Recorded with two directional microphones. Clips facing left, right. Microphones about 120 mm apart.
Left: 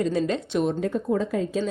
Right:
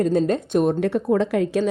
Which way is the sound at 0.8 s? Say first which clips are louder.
Right 5 dB; 75° right (ahead or behind).